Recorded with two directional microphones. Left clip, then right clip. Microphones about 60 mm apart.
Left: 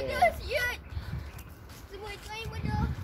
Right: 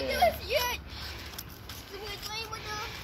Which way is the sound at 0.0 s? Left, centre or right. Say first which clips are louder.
Even; left.